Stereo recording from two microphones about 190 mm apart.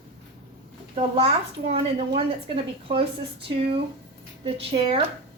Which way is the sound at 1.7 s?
30° right (ahead or behind).